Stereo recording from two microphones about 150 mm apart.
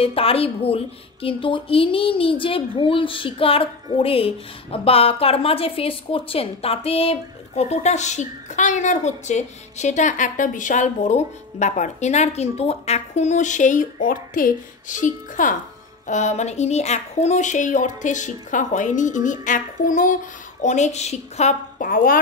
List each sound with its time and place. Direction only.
0.0 s a woman's voice: 40° left (ahead or behind); by 22.2 s 70° left (ahead or behind)